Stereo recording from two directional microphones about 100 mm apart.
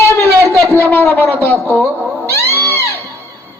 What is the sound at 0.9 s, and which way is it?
Speech, 20° left (ahead or behind).